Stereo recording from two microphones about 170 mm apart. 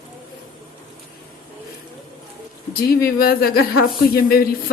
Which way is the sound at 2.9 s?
65° left (ahead or behind).